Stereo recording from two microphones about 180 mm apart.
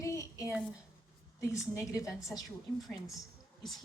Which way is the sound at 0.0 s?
15° left (ahead or behind).